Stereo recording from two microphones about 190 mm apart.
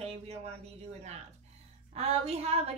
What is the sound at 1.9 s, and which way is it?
Speech, 35° right (ahead or behind).